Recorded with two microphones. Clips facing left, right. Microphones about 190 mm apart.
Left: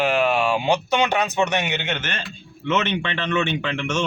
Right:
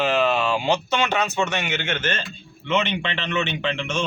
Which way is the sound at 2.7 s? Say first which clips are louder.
Even; 15° right (ahead or behind).